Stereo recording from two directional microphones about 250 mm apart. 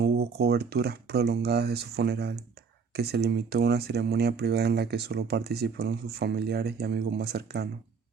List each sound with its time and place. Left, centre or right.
0.0 s speech: right